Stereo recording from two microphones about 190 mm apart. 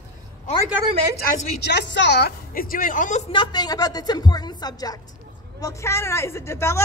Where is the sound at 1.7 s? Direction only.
65° left (ahead or behind); by 3.3 s 40° left (ahead or behind).